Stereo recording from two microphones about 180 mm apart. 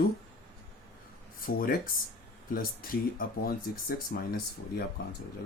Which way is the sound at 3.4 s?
55° left (ahead or behind).